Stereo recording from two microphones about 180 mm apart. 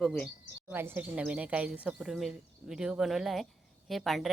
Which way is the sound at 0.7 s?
10° right (ahead or behind).